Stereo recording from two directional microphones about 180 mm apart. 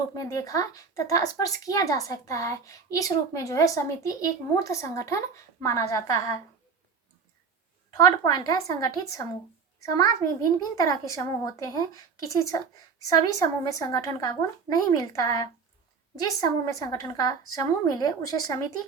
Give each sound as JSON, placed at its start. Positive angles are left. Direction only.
{"t": 0.1, "sound": "speech", "side_deg": 20}
{"t": 7.9, "sound": "a child's voice", "side_deg": 25}